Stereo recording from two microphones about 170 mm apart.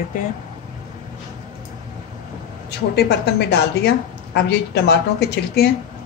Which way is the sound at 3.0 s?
75° left (ahead or behind).